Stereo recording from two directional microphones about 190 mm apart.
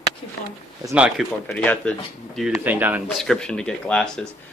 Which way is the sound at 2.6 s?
10° right (ahead or behind).